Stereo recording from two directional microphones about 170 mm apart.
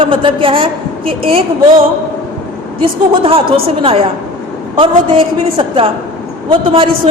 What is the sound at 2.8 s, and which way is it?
Speech, 35° right (ahead or behind).